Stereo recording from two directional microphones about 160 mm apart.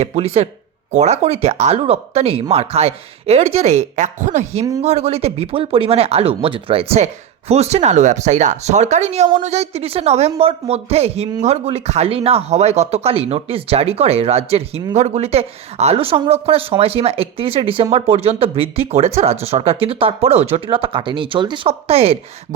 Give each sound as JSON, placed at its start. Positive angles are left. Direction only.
{"t": 0.0, "sound": "speech", "side_deg": -40}